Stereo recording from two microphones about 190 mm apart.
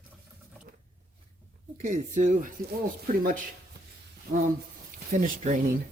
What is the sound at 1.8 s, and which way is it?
Speech, 40° right (ahead or behind).